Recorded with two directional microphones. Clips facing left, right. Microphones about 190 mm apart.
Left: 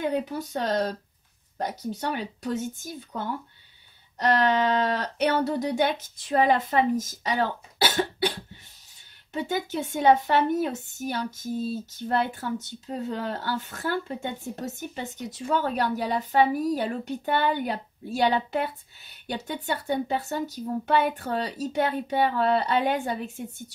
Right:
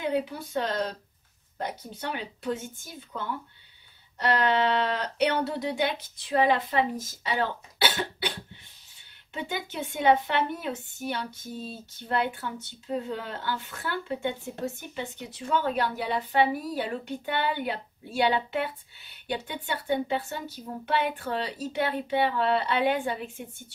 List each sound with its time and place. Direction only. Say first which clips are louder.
0.0 s speech: left 1 dB; 45° left (ahead or behind)
9.3 s speech: left 5 dB; 40° left (ahead or behind)